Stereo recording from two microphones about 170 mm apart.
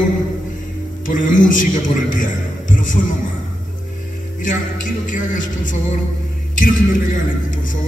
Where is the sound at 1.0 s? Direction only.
50° left (ahead or behind).